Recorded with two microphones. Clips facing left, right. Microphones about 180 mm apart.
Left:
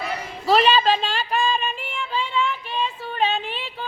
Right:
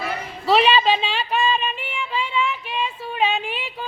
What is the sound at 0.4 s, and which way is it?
Female singing, centre (ahead or behind).